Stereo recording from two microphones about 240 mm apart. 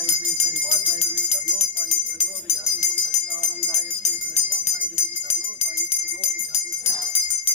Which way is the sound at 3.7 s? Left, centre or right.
Left.